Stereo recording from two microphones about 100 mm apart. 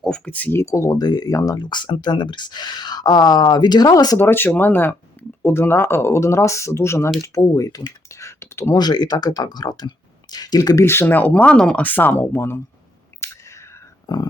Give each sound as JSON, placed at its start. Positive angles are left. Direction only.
{"t": 0.0, "sound": "speech", "side_deg": 10}
{"t": 0.6, "sound": "speech", "side_deg": 30}
{"t": 1.6, "sound": "speech", "side_deg": 50}
{"t": 4.2, "sound": "speech", "side_deg": 20}
{"t": 8.7, "sound": "speech", "side_deg": 45}
{"t": 11.9, "sound": "speech", "side_deg": 20}
{"t": 13.2, "sound": "a sound", "side_deg": 25}